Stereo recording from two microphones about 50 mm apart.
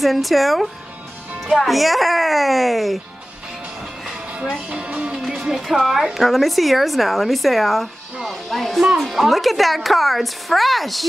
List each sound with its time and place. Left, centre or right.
0.0 s a woman's voice: centre
4.3 s music: centre
4.6 s speech: right
5.3 s music: centre
5.6 s a woman's voice: centre